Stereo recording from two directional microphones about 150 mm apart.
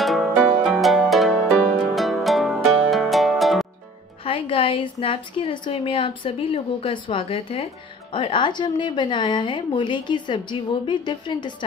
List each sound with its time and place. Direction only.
0.0 s music: centre (ahead or behind)
4.2 s a woman's voice: 35° left (ahead or behind)